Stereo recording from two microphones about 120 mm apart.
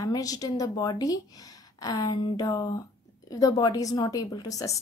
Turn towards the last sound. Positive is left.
turn(degrees=30)  # may be behind; listen again after turning